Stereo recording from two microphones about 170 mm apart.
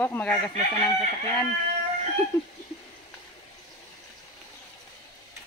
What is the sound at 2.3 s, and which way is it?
Speech, 20° left (ahead or behind).